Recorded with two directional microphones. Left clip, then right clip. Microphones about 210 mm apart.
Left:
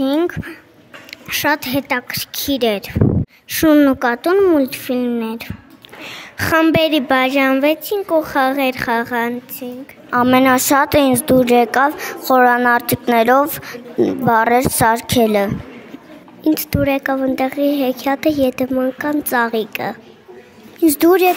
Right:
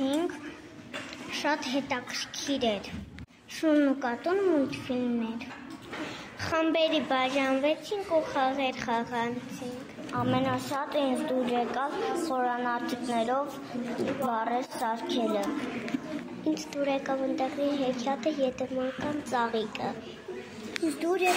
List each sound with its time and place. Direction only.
0.0 s a sound: 55° left (ahead or behind)
1.3 s speech: 55° left (ahead or behind)
16.4 s speech: 55° left (ahead or behind)
21.0 s speech: 55° left (ahead or behind)